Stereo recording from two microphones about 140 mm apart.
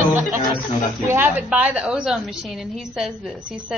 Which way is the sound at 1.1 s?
10° right (ahead or behind).